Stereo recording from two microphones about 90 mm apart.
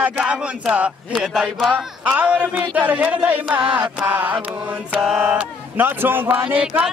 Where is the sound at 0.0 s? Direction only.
15° right (ahead or behind).